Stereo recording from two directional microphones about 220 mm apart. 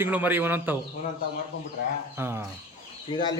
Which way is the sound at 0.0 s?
10° right (ahead or behind).